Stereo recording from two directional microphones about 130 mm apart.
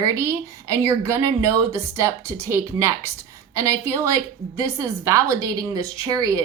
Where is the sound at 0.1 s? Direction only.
20° right (ahead or behind).